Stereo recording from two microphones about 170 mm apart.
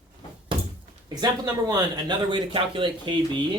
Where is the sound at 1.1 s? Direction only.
25° right (ahead or behind).